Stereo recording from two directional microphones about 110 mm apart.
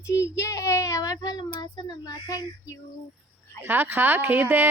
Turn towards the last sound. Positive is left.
turn(degrees=-20)  # may be behind; listen again after turning